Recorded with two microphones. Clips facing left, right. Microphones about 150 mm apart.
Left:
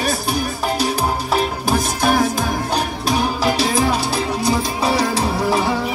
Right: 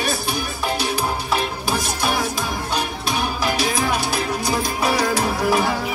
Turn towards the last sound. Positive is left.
turn(degrees=30)  # may be behind; listen again after turning